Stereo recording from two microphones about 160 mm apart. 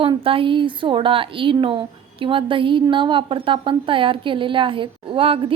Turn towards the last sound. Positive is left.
turn(degrees=-35)  # may be behind; listen again after turning